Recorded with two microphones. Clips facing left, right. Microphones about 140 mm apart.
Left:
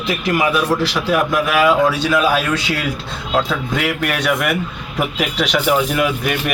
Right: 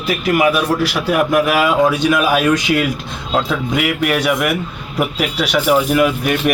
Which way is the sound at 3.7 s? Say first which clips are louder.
Right 4 dB; 5° right (ahead or behind).